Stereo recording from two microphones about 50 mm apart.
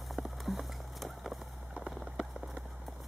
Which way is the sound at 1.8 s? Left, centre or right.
Centre.